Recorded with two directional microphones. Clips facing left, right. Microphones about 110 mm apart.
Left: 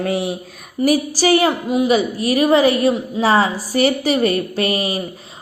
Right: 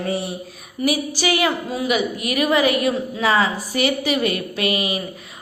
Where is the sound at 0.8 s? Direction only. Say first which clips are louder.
Left 5 dB; 40° left (ahead or behind).